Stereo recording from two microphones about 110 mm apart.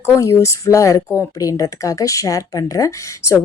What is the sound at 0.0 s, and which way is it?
Speech, 25° left (ahead or behind).